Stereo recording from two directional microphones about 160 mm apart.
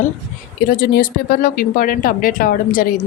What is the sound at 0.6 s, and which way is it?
Speech, 65° left (ahead or behind).